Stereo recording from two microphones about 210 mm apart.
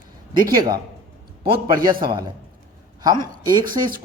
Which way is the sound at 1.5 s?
20° right (ahead or behind).